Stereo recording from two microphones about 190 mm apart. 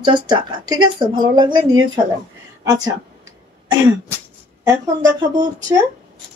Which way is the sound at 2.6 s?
20° right (ahead or behind).